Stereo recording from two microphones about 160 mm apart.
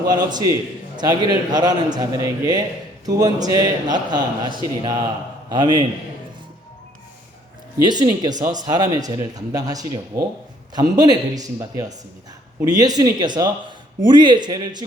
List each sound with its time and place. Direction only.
0.1 s a man's voice: 25° right (ahead or behind)
7.9 s a man's voice: 25° right (ahead or behind)